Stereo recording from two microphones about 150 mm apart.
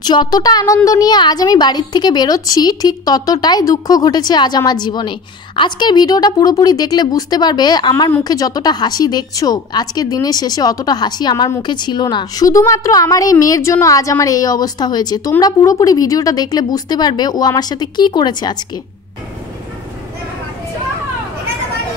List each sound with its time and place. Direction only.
0.0 s a woman's voice: 30° left (ahead or behind)